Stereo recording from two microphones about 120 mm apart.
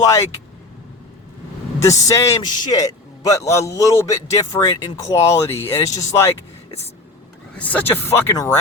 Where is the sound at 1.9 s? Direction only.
25° left (ahead or behind).